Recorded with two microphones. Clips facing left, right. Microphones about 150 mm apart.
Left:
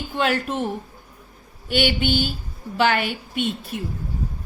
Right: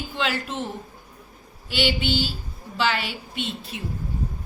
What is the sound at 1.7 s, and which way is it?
Speech, 55° left (ahead or behind).